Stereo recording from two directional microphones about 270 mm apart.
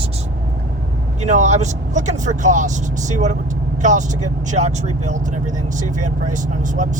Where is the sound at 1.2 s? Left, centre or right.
Right.